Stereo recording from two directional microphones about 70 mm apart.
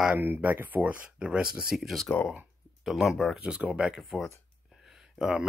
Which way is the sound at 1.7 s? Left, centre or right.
Centre.